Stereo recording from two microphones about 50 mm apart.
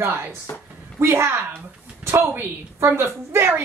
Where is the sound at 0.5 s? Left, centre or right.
Left.